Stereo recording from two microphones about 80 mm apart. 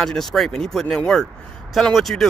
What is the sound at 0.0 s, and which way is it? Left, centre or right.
Speech, centre.